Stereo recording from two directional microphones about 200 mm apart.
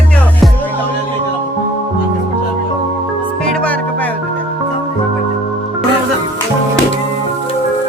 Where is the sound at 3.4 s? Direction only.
5° left (ahead or behind).